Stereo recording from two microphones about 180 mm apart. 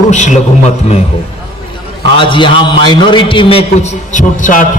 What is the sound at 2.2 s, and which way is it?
A man's voice, 25° left (ahead or behind).